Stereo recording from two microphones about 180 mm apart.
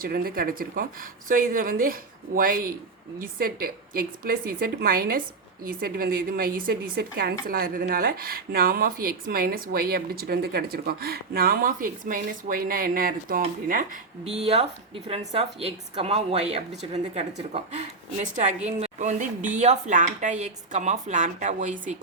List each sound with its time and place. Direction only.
0.0 s a woman's voice: 55° right (ahead or behind)
14.4 s a woman's voice: 35° right (ahead or behind)